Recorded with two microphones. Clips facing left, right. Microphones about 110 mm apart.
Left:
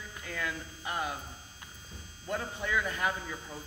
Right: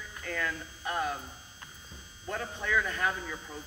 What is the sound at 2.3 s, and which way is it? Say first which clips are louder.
Speech: right 1 dB; 15° left (ahead or behind).